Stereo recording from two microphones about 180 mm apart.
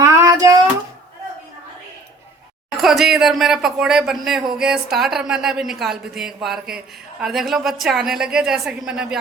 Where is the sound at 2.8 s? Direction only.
Centre (ahead or behind).